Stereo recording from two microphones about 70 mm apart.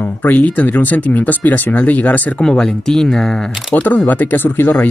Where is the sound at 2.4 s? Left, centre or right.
Centre.